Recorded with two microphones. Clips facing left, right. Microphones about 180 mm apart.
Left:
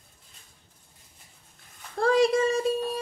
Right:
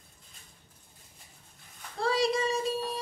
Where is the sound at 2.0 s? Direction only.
50° left (ahead or behind).